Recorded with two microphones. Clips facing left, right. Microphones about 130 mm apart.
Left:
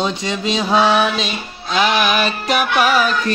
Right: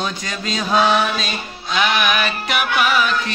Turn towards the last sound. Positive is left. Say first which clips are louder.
# left 3 dB
turn(degrees=40)  # may be behind; listen again after turning